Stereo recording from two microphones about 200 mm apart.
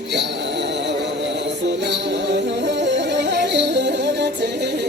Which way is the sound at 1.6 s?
60° right (ahead or behind).